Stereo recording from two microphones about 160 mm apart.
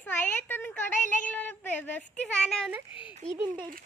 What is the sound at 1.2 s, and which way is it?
A woman's voice, 10° left (ahead or behind).